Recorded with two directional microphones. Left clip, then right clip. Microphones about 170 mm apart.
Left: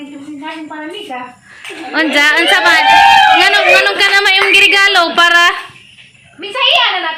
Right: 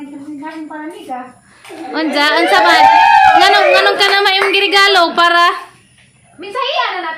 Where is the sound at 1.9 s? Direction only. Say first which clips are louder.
Left 3 dB; 10° right (ahead or behind).